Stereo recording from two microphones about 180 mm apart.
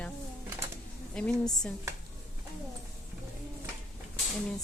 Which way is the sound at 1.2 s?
5° left (ahead or behind).